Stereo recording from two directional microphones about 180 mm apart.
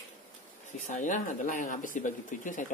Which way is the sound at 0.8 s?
45° left (ahead or behind).